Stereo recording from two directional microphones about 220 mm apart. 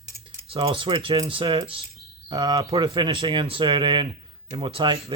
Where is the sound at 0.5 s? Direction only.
25° right (ahead or behind).